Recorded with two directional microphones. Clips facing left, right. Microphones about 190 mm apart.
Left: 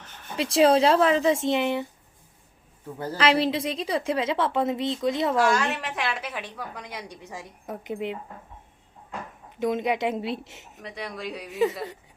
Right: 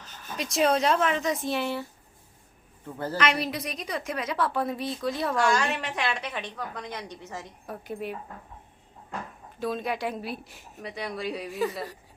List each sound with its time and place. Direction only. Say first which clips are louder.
0.3 s a woman's voice: left 5 dB; 30° left (ahead or behind)
3.2 s a woman's voice: left 6 dB; 30° left (ahead or behind)
5.4 s a woman's voice: left 2 dB; centre (ahead or behind); by 7.9 s 15° left (ahead or behind)
9.6 s a woman's voice: left 5 dB; 20° left (ahead or behind)
10.8 s a woman's voice: right 2 dB; centre (ahead or behind)